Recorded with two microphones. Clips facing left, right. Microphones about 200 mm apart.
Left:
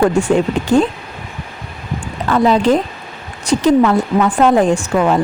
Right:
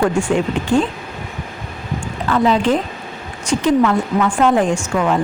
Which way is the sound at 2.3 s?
40° left (ahead or behind).